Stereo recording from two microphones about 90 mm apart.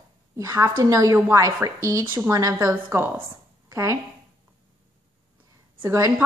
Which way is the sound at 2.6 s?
40° right (ahead or behind).